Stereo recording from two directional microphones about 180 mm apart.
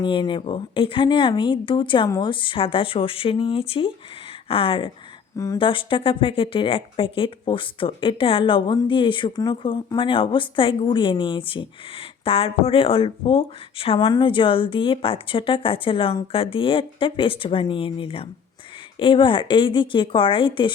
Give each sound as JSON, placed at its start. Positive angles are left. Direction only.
{"t": 0.0, "sound": "speech", "side_deg": 25}